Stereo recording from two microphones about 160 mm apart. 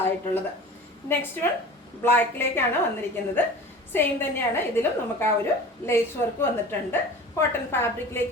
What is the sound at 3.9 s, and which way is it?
A woman's voice, 15° left (ahead or behind).